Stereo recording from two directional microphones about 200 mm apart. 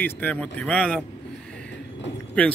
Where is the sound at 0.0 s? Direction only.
5° left (ahead or behind).